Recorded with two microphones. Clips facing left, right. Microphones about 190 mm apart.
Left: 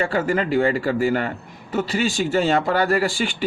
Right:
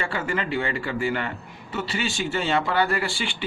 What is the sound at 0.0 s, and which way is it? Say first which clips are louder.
Speech: left 7 dB; 40° left (ahead or behind).